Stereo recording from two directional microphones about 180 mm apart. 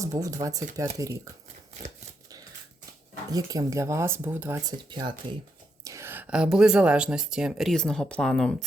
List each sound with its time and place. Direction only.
0.0 s speech: 20° right (ahead or behind)
3.2 s speech: 20° right (ahead or behind)
4.9 s speech: 25° right (ahead or behind); by 8.6 s 5° left (ahead or behind)